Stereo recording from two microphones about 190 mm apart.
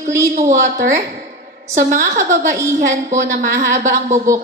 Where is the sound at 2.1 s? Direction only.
40° right (ahead or behind).